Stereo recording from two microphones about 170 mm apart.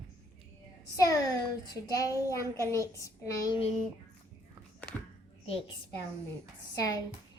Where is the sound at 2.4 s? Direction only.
15° right (ahead or behind).